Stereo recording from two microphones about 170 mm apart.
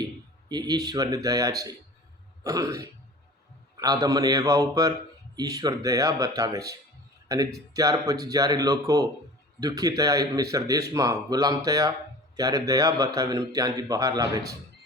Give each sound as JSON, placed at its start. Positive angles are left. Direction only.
{"t": 0.4, "sound": "speech", "side_deg": -25}
{"t": 7.8, "sound": "speech", "side_deg": -20}